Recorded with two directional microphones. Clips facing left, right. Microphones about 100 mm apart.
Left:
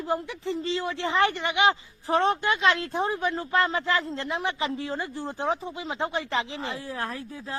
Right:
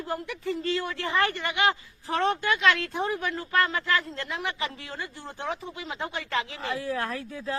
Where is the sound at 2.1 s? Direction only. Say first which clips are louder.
Left 2 dB; 30° left (ahead or behind).